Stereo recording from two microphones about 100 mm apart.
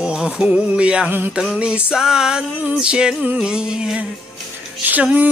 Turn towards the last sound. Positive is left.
turn(degrees=-15)  # may be behind; listen again after turning